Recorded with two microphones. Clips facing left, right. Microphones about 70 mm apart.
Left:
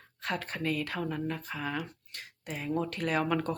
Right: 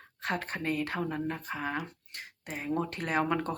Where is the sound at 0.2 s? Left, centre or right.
Right.